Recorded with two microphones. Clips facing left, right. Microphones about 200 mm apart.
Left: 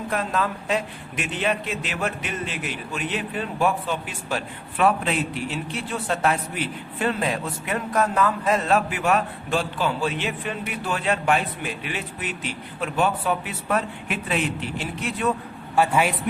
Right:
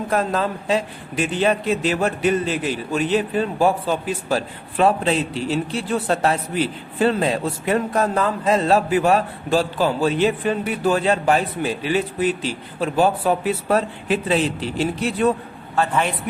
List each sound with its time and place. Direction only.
0.1 s a man's voice: 35° right (ahead or behind)
15.7 s a man's voice: 10° left (ahead or behind)